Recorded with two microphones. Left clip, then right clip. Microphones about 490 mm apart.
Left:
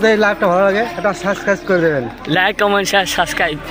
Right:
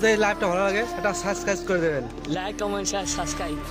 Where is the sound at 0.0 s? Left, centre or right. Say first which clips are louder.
Left 8 dB; right.